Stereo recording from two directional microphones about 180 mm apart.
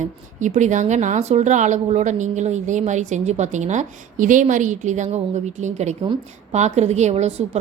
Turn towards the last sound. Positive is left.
turn(degrees=-35)  # may be behind; listen again after turning